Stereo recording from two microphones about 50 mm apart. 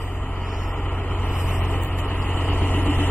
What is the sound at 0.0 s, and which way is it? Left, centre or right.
Vehicle, left.